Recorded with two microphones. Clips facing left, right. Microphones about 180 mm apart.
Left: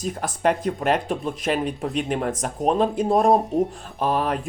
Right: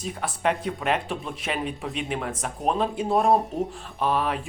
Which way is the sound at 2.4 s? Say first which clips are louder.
Left 3 dB; 40° left (ahead or behind).